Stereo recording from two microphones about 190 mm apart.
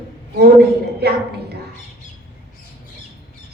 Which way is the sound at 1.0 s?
60° right (ahead or behind).